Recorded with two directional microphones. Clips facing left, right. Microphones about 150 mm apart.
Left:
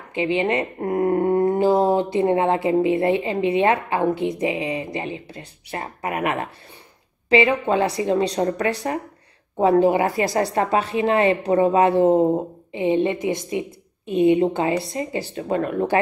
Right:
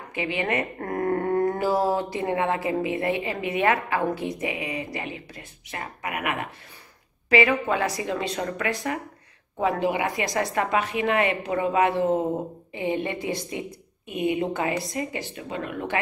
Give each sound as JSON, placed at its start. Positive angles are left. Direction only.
{"t": 0.1, "sound": "a woman's voice", "side_deg": 25}
{"t": 15.4, "sound": "speech", "side_deg": 45}